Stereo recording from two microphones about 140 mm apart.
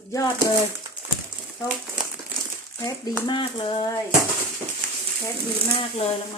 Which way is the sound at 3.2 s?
35° left (ahead or behind).